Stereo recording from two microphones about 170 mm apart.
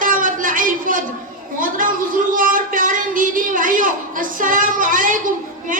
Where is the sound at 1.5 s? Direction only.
50° right (ahead or behind).